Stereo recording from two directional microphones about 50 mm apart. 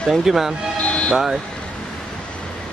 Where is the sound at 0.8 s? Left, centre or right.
Left.